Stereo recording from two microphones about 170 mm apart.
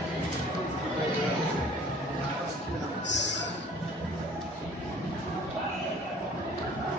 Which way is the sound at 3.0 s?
90° left.